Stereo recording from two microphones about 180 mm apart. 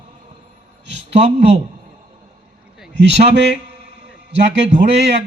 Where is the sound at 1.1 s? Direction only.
35° right (ahead or behind).